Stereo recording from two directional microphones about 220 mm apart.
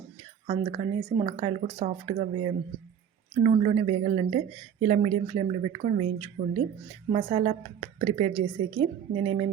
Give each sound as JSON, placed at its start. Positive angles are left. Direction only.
{"t": 0.4, "sound": "speech", "side_deg": -35}